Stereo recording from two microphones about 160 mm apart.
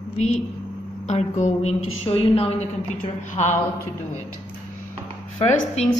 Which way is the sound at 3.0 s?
50° left (ahead or behind).